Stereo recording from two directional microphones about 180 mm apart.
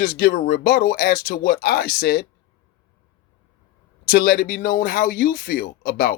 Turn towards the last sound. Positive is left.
turn(degrees=55)  # may be behind; listen again after turning